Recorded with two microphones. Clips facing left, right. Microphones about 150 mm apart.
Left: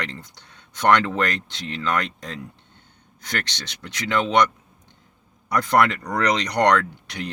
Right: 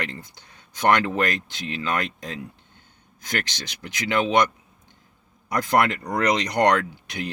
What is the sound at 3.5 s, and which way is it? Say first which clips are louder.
Speech: right 1 dB; 70° left (ahead or behind).